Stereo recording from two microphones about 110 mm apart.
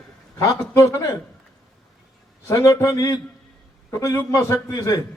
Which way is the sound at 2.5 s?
30° left (ahead or behind).